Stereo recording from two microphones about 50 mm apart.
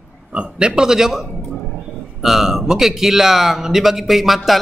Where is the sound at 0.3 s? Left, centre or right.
Right.